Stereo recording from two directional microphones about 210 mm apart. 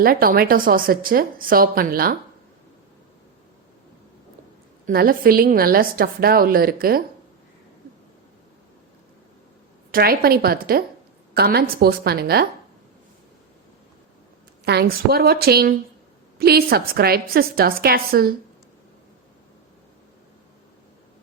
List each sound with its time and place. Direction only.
0.0 s a woman's voice: 45° right (ahead or behind)
4.9 s a woman's voice: 45° right (ahead or behind)
9.9 s a woman's voice: 45° right (ahead or behind)
14.6 s a woman's voice: 50° right (ahead or behind)